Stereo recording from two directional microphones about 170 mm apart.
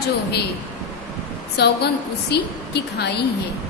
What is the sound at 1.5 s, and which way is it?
A woman's voice, 75° left (ahead or behind).